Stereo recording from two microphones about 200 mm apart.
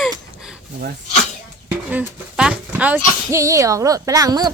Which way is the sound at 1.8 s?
5° right (ahead or behind).